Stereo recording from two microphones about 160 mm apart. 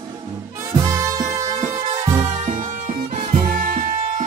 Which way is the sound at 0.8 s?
20° right (ahead or behind).